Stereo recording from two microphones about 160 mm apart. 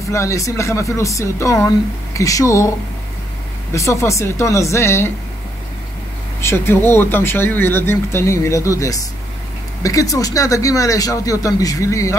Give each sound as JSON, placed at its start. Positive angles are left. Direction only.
{"t": 0.1, "sound": "speech", "side_deg": 20}
{"t": 3.7, "sound": "speech", "side_deg": 20}
{"t": 6.4, "sound": "speech", "side_deg": 15}